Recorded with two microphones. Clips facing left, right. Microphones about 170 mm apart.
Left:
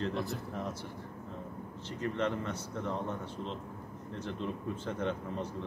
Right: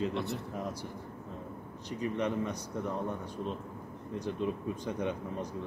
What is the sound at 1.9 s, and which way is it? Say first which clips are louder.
Speech: right 1 dB; 15° right (ahead or behind).